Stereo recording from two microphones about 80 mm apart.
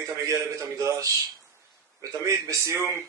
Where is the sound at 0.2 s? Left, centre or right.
Right.